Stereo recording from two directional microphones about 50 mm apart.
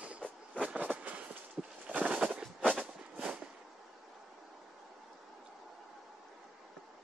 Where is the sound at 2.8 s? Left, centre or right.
Right.